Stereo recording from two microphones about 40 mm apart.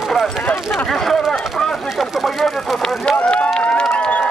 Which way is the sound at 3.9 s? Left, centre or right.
Left.